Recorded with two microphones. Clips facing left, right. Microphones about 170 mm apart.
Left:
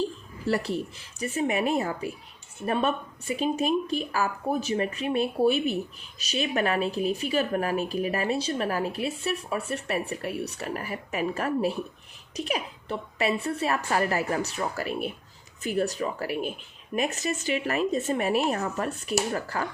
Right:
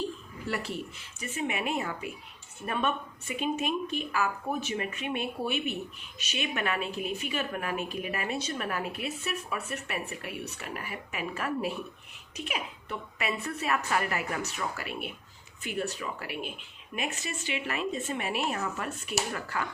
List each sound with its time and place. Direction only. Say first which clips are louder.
0.4 s speech: left 7 dB; 35° left (ahead or behind)